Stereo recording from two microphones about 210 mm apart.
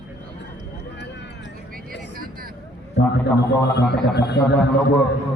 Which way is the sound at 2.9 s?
55° left (ahead or behind).